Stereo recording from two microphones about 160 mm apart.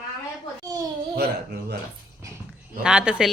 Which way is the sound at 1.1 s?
80° right.